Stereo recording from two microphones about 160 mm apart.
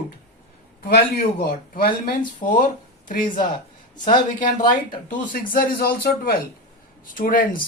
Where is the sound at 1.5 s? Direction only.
65° left (ahead or behind).